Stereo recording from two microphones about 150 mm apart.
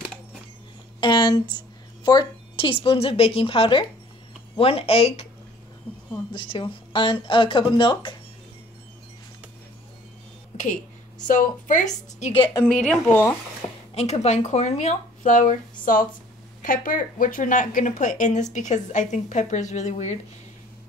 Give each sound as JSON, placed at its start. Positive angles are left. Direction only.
{"t": 1.0, "sound": "a sound", "side_deg": 30}
{"t": 2.0, "sound": "speech", "side_deg": 30}
{"t": 6.3, "sound": "speech", "side_deg": 35}
{"t": 11.2, "sound": "speech", "side_deg": 60}
{"t": 12.7, "sound": "speech", "side_deg": 5}
{"t": 13.9, "sound": "speech", "side_deg": 45}